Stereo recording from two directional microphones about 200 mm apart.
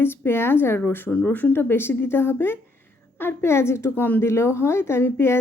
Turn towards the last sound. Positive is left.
turn(degrees=10)  # may be behind; listen again after turning